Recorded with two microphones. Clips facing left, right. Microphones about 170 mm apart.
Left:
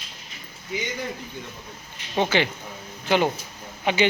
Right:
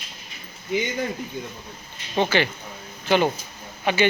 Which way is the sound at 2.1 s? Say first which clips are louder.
Right 1 dB; 15° left (ahead or behind).